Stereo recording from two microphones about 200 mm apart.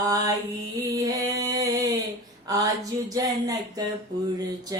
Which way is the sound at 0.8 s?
15° right (ahead or behind).